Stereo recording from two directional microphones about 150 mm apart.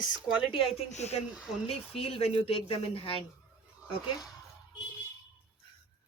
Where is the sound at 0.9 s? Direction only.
45° left (ahead or behind).